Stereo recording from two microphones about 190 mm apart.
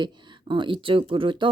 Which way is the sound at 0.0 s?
25° right (ahead or behind).